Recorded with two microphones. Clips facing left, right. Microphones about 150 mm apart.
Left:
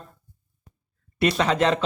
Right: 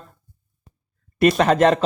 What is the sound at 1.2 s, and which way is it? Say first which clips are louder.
Speech: right 6 dB; 50° right (ahead or behind).